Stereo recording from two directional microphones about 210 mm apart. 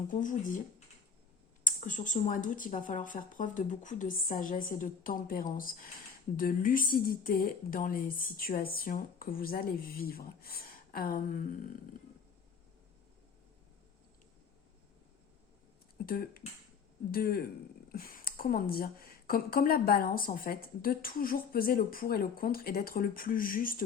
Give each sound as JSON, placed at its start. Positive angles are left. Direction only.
{"t": 0.1, "sound": "speech", "side_deg": 40}
{"t": 1.6, "sound": "speech", "side_deg": 35}
{"t": 16.0, "sound": "speech", "side_deg": 45}